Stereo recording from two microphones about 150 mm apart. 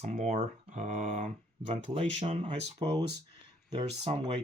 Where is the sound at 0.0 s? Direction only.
60° right (ahead or behind).